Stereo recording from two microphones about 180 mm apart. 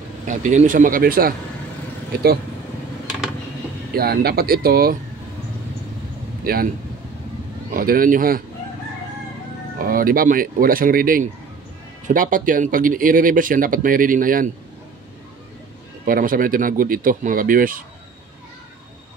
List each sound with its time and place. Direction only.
0.3 s speech: 45° right (ahead or behind)
3.9 s speech: 60° right (ahead or behind)
6.4 s speech: 55° right (ahead or behind)
7.7 s speech: 55° right (ahead or behind)
9.8 s speech: 50° right (ahead or behind)
16.1 s speech: 50° right (ahead or behind)